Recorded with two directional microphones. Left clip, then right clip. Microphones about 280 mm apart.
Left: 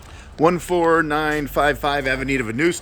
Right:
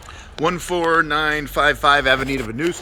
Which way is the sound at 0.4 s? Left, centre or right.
Centre.